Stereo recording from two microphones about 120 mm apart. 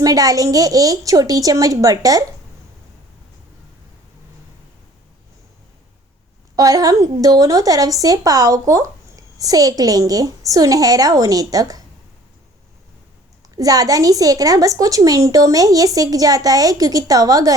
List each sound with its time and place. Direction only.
0.0 s a woman's voice: 30° right (ahead or behind)
6.6 s a woman's voice: 30° right (ahead or behind)
13.6 s a woman's voice: 30° right (ahead or behind)